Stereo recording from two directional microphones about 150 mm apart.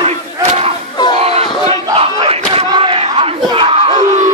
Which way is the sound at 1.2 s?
40° right (ahead or behind).